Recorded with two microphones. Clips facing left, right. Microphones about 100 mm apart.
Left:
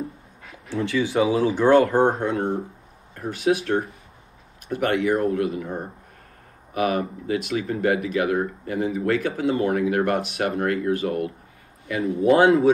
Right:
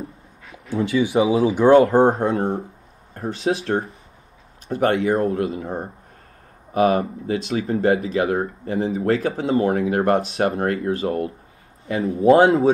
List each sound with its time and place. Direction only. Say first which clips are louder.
0.7 s speech: right 3 dB; 25° right (ahead or behind)